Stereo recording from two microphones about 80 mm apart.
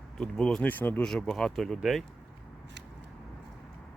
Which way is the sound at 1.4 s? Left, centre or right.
Centre.